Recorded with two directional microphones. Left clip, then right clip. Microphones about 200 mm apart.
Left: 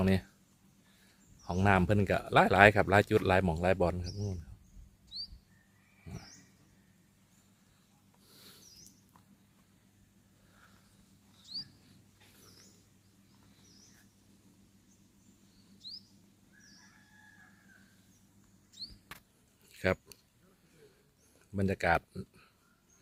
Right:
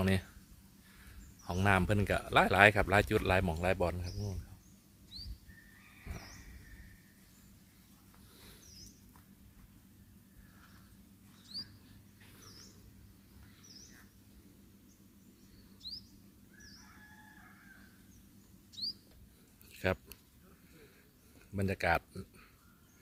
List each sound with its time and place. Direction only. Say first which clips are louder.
0.0 s speech: left 2 dB; 5° left (ahead or behind)
1.4 s speech: left 2 dB; 5° left (ahead or behind)
19.7 s a sound: left 3 dB; 5° left (ahead or behind)
21.5 s speech: left 2 dB; 5° left (ahead or behind)